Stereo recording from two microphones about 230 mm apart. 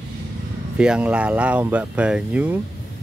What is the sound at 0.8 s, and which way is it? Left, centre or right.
Speech, centre.